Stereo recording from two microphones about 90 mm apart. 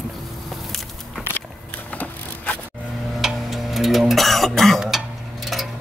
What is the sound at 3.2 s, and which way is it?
Cough, centre (ahead or behind).